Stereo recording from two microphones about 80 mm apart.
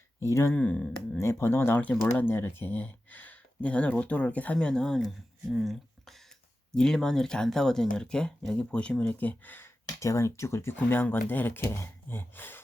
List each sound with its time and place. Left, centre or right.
0.2 s speech: left
0.5 s speech: centre
1.2 s speech: left; by 5.0 s centre
5.5 s speech: centre; by 9.7 s left
10.0 s speech: left
10.8 s speech: left